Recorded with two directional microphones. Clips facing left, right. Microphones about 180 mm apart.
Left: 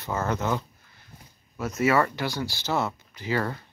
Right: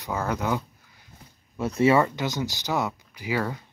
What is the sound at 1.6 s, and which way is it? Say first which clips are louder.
Speech: right 4 dB; 30° right (ahead or behind).